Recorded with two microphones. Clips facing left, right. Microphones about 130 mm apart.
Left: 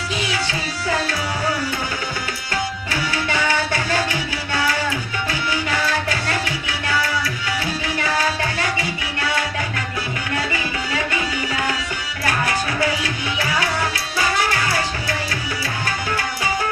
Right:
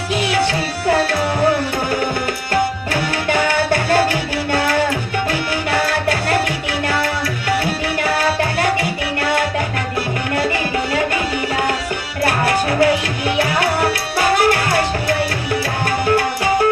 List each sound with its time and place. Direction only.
0.2 s music: 55° right (ahead or behind)
2.5 s tabla: 55° right (ahead or behind)
16.0 s music: 55° right (ahead or behind)